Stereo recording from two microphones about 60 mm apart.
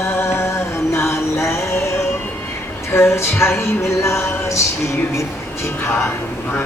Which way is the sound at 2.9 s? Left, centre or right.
Left.